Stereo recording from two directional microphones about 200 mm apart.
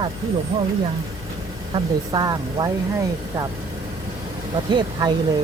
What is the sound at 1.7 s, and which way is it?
Speech, 20° right (ahead or behind).